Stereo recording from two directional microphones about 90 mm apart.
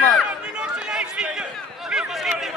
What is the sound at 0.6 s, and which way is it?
Chatter, 10° right (ahead or behind).